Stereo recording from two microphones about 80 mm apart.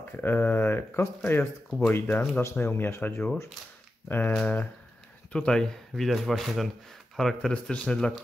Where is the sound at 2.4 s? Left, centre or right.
Left.